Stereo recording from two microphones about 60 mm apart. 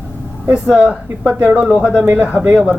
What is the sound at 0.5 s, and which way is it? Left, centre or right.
Speech, right.